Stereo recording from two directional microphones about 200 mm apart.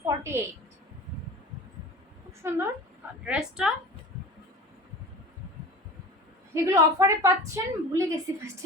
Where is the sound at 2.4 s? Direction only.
15° right (ahead or behind).